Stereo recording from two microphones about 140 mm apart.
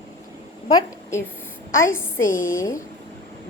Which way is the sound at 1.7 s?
20° left (ahead or behind).